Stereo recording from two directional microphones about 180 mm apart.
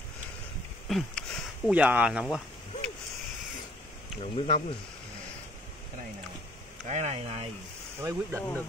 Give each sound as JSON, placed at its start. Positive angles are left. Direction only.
{"t": 0.8, "sound": "a sound", "side_deg": 0}
{"t": 1.7, "sound": "speech", "side_deg": -10}
{"t": 4.2, "sound": "speech", "side_deg": 35}
{"t": 6.9, "sound": "speech", "side_deg": -40}
{"t": 8.0, "sound": "speech", "side_deg": -15}
{"t": 8.4, "sound": "speech", "side_deg": 10}